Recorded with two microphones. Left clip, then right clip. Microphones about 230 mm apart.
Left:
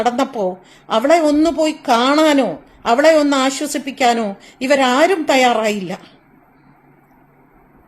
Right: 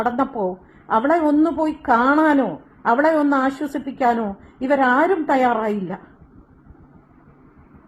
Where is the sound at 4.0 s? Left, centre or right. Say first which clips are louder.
Left 4 dB; centre.